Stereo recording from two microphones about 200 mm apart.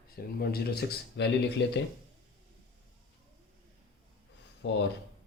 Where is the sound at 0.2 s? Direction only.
50° left (ahead or behind).